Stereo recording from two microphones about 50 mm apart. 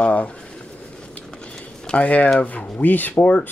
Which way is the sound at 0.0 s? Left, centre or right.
Left.